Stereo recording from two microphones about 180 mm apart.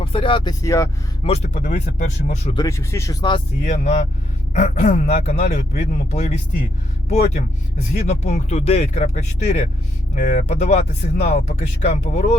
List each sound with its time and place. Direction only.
0.0 s speech: 30° left (ahead or behind)
1.2 s speech: 35° left (ahead or behind)
2.6 s speech: 15° left (ahead or behind)
3.6 s speech: 40° left (ahead or behind)